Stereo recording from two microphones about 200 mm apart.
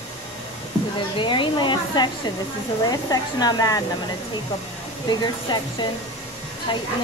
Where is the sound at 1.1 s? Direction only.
25° left (ahead or behind).